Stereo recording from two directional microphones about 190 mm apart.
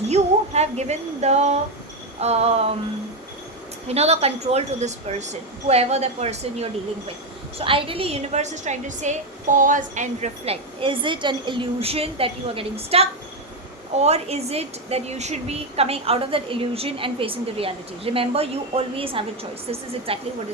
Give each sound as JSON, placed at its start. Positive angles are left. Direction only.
{"t": 0.1, "sound": "a woman's voice", "side_deg": -35}
{"t": 3.8, "sound": "a woman's voice", "side_deg": -35}